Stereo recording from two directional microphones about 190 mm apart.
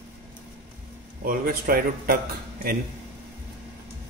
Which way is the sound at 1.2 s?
50° right (ahead or behind).